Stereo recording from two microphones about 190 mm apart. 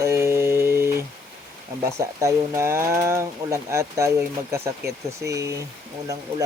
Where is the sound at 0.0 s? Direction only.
15° right (ahead or behind).